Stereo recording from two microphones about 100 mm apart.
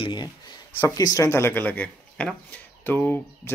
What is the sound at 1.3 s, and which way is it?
Speech, 20° left (ahead or behind).